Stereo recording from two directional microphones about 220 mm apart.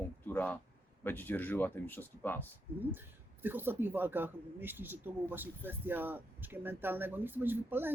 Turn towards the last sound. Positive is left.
turn(degrees=-10)  # may be behind; listen again after turning